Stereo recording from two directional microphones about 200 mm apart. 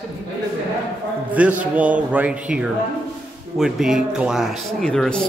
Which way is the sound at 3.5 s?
5° right (ahead or behind).